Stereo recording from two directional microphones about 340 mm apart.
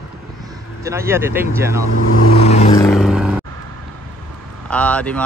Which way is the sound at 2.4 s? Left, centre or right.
Centre.